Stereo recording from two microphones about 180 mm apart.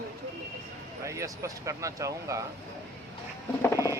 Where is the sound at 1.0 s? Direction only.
15° right (ahead or behind).